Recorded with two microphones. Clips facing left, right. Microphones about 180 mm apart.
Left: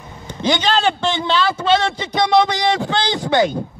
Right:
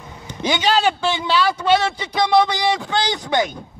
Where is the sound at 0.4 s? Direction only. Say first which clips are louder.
Left 1 dB; 10° right (ahead or behind).